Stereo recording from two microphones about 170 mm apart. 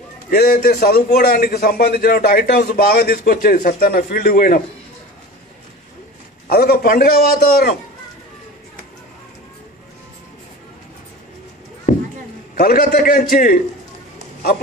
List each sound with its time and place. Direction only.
0.3 s a man's voice: 65° left (ahead or behind)
6.4 s a man's voice: 65° left (ahead or behind)
11.9 s clip-clop: 50° left (ahead or behind)
12.5 s a man's voice: 60° left (ahead or behind)